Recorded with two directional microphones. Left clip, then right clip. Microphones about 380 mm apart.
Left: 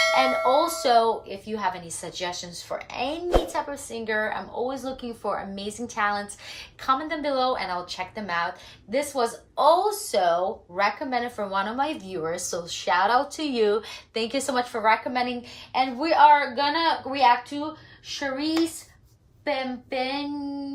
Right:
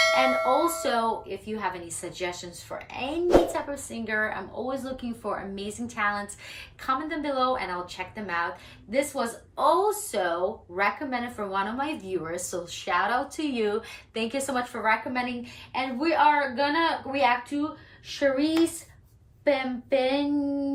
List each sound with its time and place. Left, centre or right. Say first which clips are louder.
0.0 s speech: left 1 dB; centre